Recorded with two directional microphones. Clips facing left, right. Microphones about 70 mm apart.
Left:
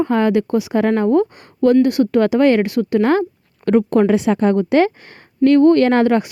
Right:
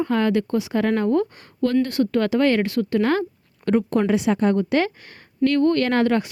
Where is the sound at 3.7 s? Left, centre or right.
Left.